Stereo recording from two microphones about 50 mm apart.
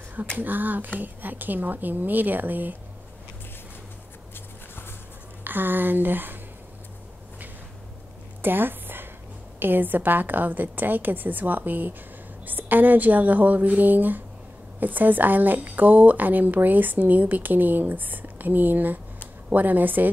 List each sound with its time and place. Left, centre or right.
0.4 s speech: right
5.4 s speech: right
8.4 s a sound: right
9.6 s speech: right